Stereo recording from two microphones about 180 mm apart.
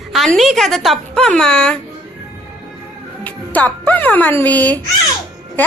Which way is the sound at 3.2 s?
10° left (ahead or behind).